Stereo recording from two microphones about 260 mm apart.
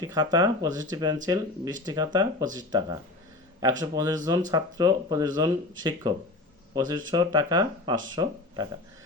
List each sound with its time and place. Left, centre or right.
0.0 s speech: centre